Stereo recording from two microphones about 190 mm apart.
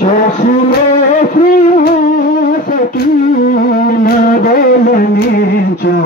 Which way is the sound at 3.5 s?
50° left (ahead or behind).